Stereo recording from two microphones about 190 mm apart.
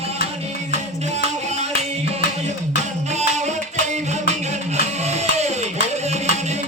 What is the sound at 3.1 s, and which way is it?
Music, 35° right (ahead or behind).